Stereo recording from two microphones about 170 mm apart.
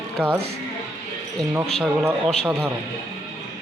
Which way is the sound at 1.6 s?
Centre (ahead or behind).